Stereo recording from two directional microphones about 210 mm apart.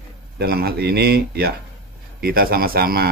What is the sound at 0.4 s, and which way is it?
Speech, 50° right (ahead or behind).